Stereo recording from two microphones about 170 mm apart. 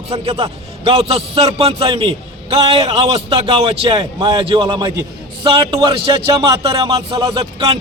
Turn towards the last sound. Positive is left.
turn(degrees=-25)  # may be behind; listen again after turning